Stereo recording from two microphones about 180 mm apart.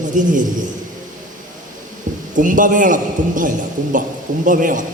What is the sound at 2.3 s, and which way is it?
A man's voice, 45° right (ahead or behind).